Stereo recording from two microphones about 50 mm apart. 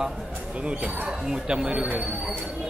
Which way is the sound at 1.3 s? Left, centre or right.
Centre.